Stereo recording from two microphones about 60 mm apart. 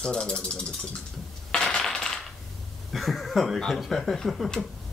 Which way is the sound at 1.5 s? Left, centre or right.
Centre.